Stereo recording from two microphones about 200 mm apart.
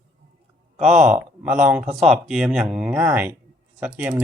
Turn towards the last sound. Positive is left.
turn(degrees=-10)  # may be behind; listen again after turning